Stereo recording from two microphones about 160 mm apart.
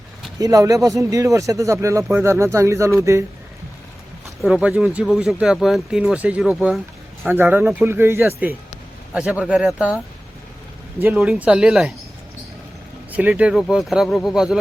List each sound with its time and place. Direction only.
0.3 s speech: 20° right (ahead or behind)
4.4 s speech: 5° right (ahead or behind)
11.0 s speech: 5° right (ahead or behind)
13.1 s speech: 10° right (ahead or behind)